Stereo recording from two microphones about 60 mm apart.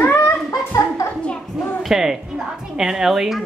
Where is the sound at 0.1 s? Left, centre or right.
Left.